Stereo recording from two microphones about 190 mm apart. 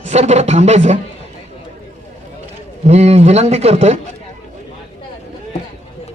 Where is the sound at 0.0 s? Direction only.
35° right (ahead or behind).